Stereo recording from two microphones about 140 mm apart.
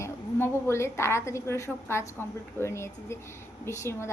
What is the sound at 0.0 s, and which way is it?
A woman's voice, 15° left (ahead or behind).